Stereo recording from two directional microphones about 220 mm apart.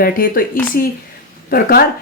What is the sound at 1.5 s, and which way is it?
Speech, 45° left (ahead or behind).